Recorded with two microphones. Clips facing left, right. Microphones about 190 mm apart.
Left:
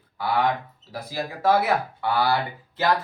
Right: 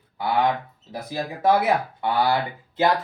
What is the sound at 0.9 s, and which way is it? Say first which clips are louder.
Speech: right 1 dB; 20° right (ahead or behind).